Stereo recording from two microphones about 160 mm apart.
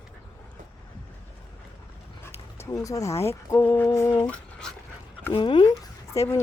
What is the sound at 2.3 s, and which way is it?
Speech, 15° left (ahead or behind).